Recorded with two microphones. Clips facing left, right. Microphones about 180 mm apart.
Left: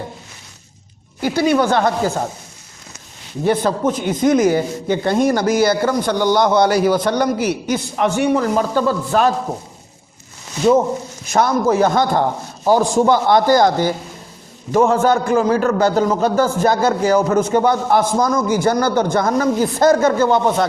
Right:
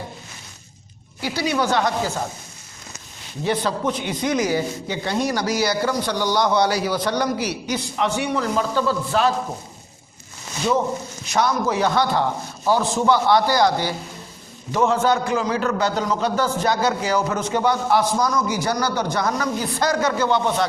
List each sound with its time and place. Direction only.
1.2 s a man's voice: 50° left (ahead or behind)
3.4 s a man's voice: 50° left (ahead or behind)
11.3 s a man's voice: 50° left (ahead or behind)